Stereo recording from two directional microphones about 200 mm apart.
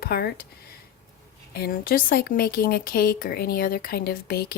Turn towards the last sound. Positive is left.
turn(degrees=50)  # may be behind; listen again after turning